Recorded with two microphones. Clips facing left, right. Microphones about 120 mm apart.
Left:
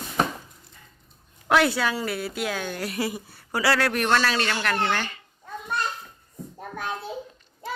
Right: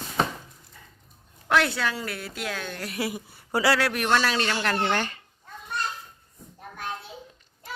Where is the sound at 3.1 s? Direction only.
20° right (ahead or behind).